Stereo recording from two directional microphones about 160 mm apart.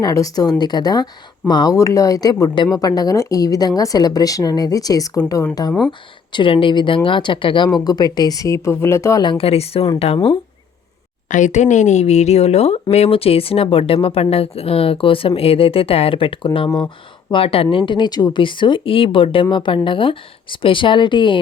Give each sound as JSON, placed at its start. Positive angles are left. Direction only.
{"t": 0.0, "sound": "speech", "side_deg": 20}
{"t": 11.3, "sound": "speech", "side_deg": 50}
{"t": 17.3, "sound": "speech", "side_deg": 35}